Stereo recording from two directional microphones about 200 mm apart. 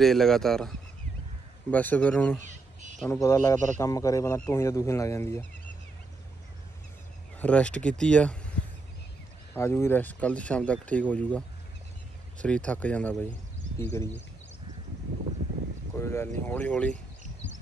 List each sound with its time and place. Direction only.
0.0 s speech: centre (ahead or behind)
2.4 s a sound: 35° right (ahead or behind)
3.1 s speech: 15° left (ahead or behind)
7.3 s speech: 5° left (ahead or behind)
16.0 s speech: 15° left (ahead or behind)